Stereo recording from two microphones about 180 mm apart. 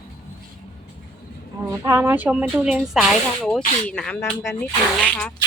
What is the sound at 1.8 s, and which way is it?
Speech, 15° right (ahead or behind).